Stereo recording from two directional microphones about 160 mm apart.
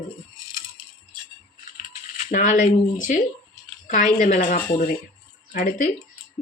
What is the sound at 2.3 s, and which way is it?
A woman's voice, 55° left (ahead or behind).